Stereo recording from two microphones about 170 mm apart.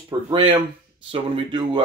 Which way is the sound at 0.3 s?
30° right (ahead or behind).